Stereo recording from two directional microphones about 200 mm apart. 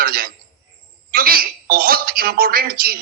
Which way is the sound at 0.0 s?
45° right (ahead or behind).